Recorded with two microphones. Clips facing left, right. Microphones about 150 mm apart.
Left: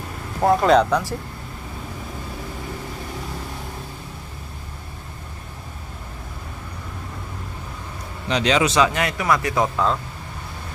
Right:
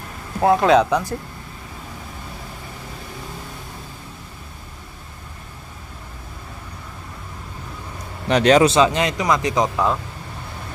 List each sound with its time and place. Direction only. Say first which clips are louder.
0.4 s speech: right 1 dB; 5° right (ahead or behind)
8.3 s speech: right 6 dB; 50° right (ahead or behind)
8.6 s speech: right 3 dB; 25° right (ahead or behind)